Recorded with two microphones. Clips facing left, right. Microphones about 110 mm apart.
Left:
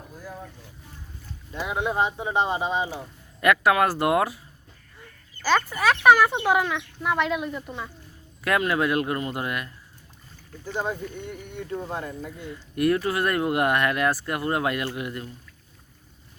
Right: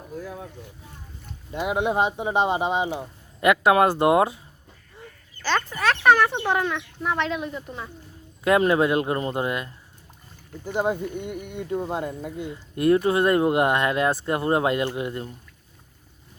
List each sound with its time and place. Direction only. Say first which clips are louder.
1.5 s speech: right 3 dB; 20° right (ahead or behind)
5.4 s speech: left 2 dB; 10° left (ahead or behind)
8.4 s speech: right 4 dB; 25° right (ahead or behind)